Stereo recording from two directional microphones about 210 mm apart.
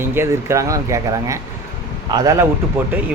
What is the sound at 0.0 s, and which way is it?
Speech, 10° right (ahead or behind).